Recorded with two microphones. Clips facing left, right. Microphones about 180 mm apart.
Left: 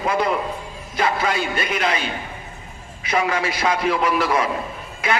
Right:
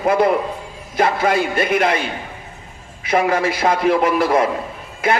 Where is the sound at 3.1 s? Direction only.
55° right (ahead or behind).